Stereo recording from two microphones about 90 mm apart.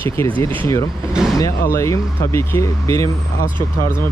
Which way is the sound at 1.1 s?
5° right (ahead or behind).